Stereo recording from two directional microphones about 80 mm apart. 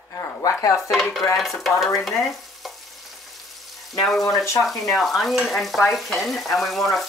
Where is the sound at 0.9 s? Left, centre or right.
Centre.